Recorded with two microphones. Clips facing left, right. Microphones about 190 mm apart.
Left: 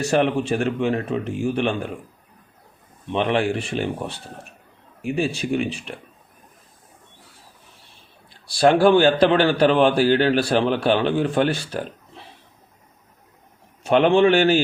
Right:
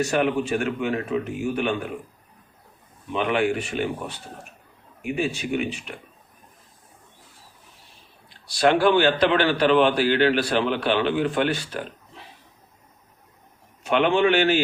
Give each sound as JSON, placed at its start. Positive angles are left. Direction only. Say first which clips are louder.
{"t": 0.0, "sound": "a man's voice", "louder": "left 2 dB", "side_deg": 30}
{"t": 3.1, "sound": "a man's voice", "louder": "left 2 dB", "side_deg": 30}
{"t": 8.5, "sound": "a man's voice", "louder": "left 4 dB", "side_deg": 35}
{"t": 13.8, "sound": "a man's voice", "louder": "left 4 dB", "side_deg": 35}